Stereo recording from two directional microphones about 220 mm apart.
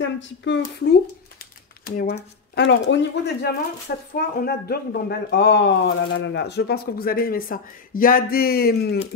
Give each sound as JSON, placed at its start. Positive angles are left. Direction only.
{"t": 0.0, "sound": "speech", "side_deg": 55}
{"t": 1.9, "sound": "speech", "side_deg": 45}
{"t": 2.5, "sound": "speech", "side_deg": 55}
{"t": 4.1, "sound": "speech", "side_deg": 45}